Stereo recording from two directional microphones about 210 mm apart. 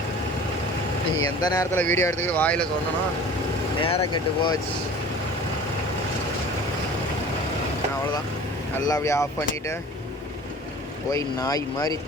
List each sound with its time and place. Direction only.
1.4 s speech: 20° left (ahead or behind)
3.8 s speech: 25° left (ahead or behind)
8.9 s speech: 15° left (ahead or behind)
11.1 s speech: 15° left (ahead or behind)